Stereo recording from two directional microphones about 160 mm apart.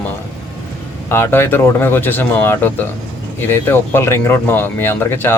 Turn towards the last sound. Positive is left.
turn(degrees=15)  # may be behind; listen again after turning